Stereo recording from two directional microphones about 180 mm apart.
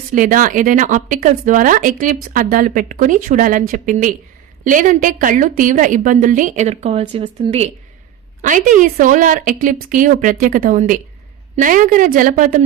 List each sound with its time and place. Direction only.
0.1 s speech: 50° right (ahead or behind)
8.4 s speech: 45° right (ahead or behind)